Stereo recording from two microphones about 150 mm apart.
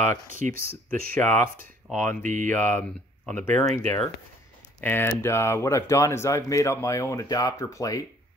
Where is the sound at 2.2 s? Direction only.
60° right (ahead or behind).